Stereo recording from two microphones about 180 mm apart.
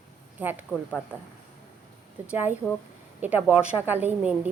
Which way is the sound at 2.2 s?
10° right (ahead or behind).